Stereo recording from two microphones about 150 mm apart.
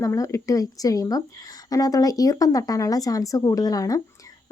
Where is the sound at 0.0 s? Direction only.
20° left (ahead or behind).